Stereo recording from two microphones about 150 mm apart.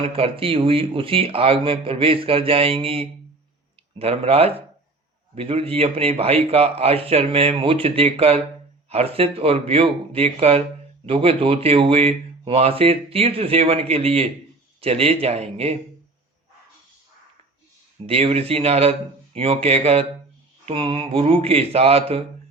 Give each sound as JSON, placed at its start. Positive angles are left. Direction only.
{"t": 0.0, "sound": "speech", "side_deg": -40}
{"t": 18.0, "sound": "speech", "side_deg": -40}